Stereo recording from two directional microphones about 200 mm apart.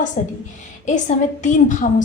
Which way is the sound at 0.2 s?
40° left (ahead or behind).